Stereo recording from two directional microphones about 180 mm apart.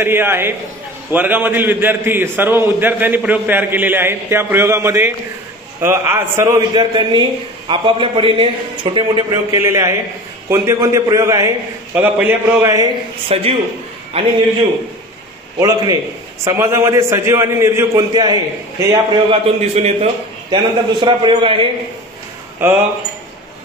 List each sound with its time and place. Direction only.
0.0 s a man's voice: 15° right (ahead or behind)
13.3 s a man's voice: 30° right (ahead or behind)
15.6 s a man's voice: 20° right (ahead or behind)
18.9 s a man's voice: 35° right (ahead or behind)
20.5 s a man's voice: 25° right (ahead or behind)